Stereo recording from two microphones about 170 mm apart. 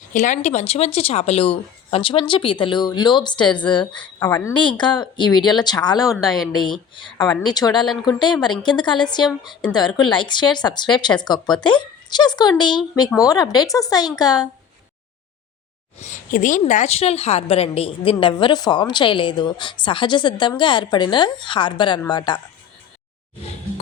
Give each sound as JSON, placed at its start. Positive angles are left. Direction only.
{"t": 0.1, "sound": "a woman's voice", "side_deg": 45}
{"t": 6.2, "sound": "speech", "side_deg": 0}
{"t": 6.9, "sound": "a woman's voice", "side_deg": 25}
{"t": 16.0, "sound": "a woman's voice", "side_deg": 45}